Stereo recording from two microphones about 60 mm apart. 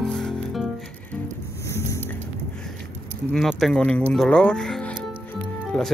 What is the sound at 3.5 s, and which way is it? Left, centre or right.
Speech, centre.